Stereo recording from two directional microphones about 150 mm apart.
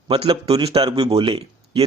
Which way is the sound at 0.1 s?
40° right (ahead or behind).